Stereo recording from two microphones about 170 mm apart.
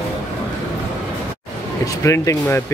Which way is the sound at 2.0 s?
15° left (ahead or behind).